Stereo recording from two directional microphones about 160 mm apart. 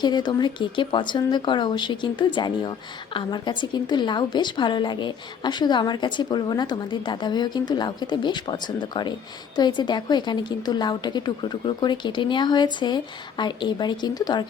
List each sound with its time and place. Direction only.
0.0 s speech: 25° left (ahead or behind)